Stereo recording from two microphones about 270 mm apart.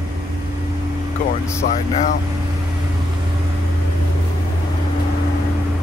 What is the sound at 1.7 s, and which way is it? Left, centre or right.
Speech, left.